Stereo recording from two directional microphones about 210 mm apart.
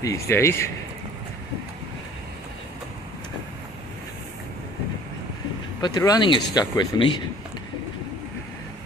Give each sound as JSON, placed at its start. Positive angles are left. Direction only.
{"t": 0.0, "sound": "speech", "side_deg": 15}
{"t": 5.8, "sound": "speech", "side_deg": 20}